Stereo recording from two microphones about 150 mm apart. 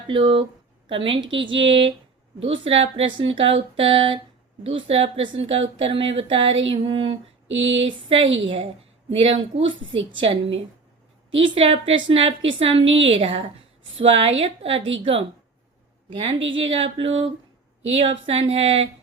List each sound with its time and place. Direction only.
0.1 s speech: 35° right (ahead or behind)
16.2 s speech: 35° right (ahead or behind)